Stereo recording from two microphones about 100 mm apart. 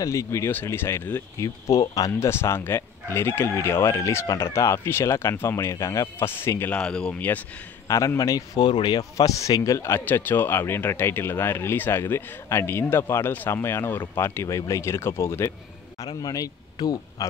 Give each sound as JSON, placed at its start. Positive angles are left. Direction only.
{"t": 0.0, "sound": "speech", "side_deg": 30}
{"t": 1.4, "sound": "speech", "side_deg": 35}
{"t": 6.7, "sound": "speech", "side_deg": 10}
{"t": 7.9, "sound": "speech", "side_deg": 30}
{"t": 16.1, "sound": "speech", "side_deg": 40}